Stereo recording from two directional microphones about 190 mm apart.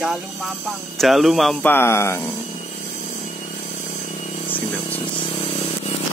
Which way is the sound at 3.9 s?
40° left (ahead or behind).